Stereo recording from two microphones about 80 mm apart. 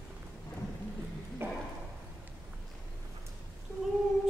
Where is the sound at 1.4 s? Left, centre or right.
Right.